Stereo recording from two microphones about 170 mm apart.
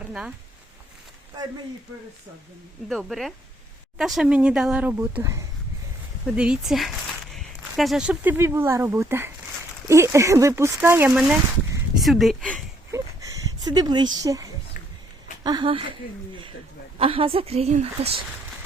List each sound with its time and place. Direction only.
0.1 s speech: 5° right (ahead or behind)
2.9 s speech: centre (ahead or behind); by 5.5 s 15° right (ahead or behind)
6.2 s speech: 5° right (ahead or behind)
12.9 s a sound: 20° right (ahead or behind)
15.4 s speech: 30° right (ahead or behind)
17.0 s a woman's voice: 30° right (ahead or behind)